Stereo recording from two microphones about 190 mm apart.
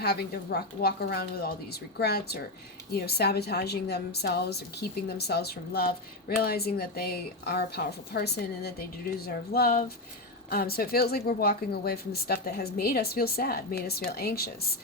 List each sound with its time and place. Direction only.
0.0 s a woman's voice: 55° left (ahead or behind)